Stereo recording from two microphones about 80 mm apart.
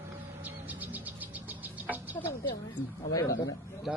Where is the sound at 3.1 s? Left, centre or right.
Left.